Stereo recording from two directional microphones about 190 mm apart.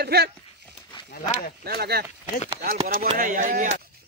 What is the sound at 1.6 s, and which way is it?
Speech, 55° right (ahead or behind).